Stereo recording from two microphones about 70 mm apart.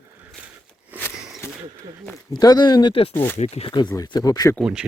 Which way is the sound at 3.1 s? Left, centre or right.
Left.